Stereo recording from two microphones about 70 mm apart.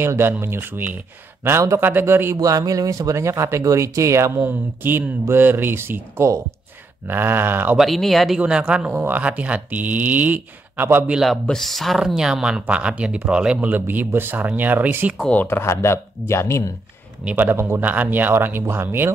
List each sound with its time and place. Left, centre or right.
0.0 s speech: right
1.4 s speech: right
1.8 s speech: right
2.3 s speech: right
4.4 s speech: right
7.1 s speech: right
7.7 s speech: centre
8.4 s speech: centre; by 11.1 s right
11.5 s speech: centre; by 15.1 s right
15.4 s speech: left
17.4 s speech: right